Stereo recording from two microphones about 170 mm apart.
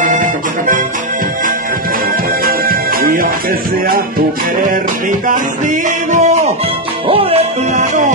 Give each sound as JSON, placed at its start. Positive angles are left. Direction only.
{"t": 0.0, "sound": "music", "side_deg": -50}
{"t": 2.4, "sound": "music", "side_deg": -60}
{"t": 5.3, "sound": "music", "side_deg": -50}
{"t": 7.1, "sound": "speech", "side_deg": -35}